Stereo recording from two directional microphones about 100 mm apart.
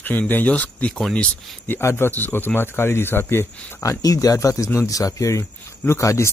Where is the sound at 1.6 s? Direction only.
25° left (ahead or behind).